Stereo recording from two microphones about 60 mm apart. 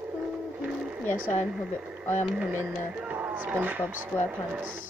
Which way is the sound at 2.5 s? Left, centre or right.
Right.